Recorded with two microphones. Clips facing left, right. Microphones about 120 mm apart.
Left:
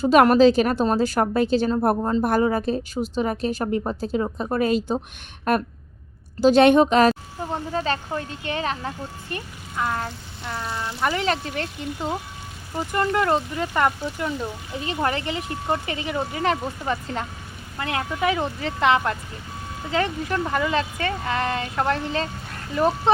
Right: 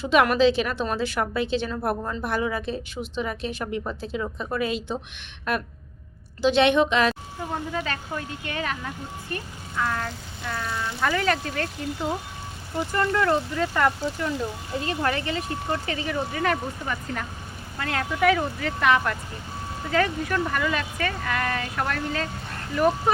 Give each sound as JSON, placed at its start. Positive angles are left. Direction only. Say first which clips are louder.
{"t": 0.0, "sound": "a woman's voice", "louder": "left 5 dB", "side_deg": 40}
{"t": 5.5, "sound": "a sound", "louder": "left 6 dB", "side_deg": 45}
{"t": 6.4, "sound": "a woman's voice", "louder": "left 5 dB", "side_deg": 40}
{"t": 12.9, "sound": "speech", "louder": "left 2 dB", "side_deg": 20}